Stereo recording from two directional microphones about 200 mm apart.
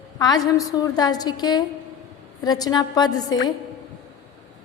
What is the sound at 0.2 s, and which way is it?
A woman's voice, 20° left (ahead or behind).